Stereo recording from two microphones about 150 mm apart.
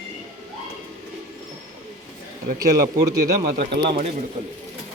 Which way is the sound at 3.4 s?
80° right.